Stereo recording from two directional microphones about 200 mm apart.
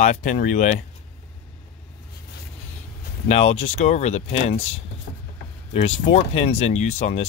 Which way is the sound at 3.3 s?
35° left (ahead or behind).